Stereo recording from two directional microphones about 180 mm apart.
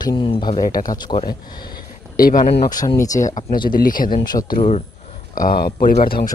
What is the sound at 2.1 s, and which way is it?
Speech, 55° left (ahead or behind).